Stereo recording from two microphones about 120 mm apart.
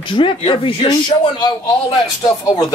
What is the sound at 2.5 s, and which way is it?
Speech, 30° left (ahead or behind).